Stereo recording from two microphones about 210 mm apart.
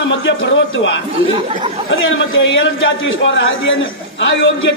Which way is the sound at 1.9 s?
65° left (ahead or behind).